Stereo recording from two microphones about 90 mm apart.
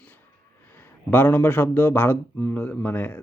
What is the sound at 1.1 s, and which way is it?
Speech, 25° left (ahead or behind).